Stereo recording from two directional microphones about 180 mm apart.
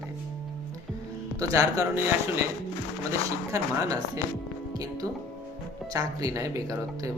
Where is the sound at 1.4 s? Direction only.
20° right (ahead or behind).